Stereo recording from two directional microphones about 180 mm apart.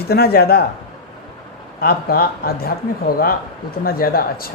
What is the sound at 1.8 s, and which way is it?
Speech, 55° left (ahead or behind).